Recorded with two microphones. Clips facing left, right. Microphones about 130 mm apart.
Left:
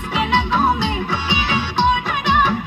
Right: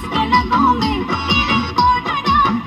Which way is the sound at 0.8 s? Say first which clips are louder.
Right 3 dB; 65° right (ahead or behind).